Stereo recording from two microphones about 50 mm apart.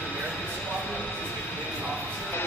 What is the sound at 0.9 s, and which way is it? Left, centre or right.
Speech, left.